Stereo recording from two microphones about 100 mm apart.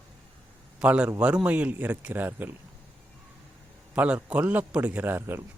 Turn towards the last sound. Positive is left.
turn(degrees=-20)  # may be behind; listen again after turning